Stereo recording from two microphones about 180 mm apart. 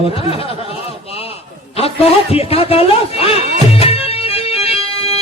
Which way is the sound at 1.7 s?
35° left (ahead or behind).